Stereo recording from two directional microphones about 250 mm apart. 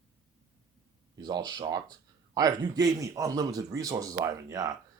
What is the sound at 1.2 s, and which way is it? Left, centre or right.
Speech, centre.